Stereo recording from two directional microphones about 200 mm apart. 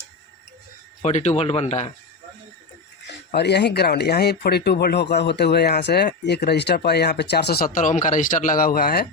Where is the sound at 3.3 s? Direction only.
55° left (ahead or behind).